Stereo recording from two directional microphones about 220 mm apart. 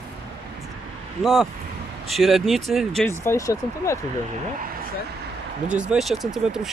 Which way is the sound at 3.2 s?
15° left (ahead or behind).